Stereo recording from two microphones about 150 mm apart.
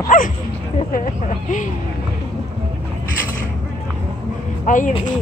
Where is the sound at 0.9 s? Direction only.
60° left (ahead or behind).